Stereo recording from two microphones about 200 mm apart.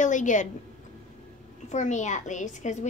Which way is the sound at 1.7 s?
35° left (ahead or behind).